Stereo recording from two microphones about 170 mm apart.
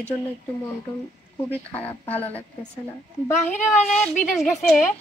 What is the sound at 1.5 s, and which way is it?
Speech, 10° left (ahead or behind).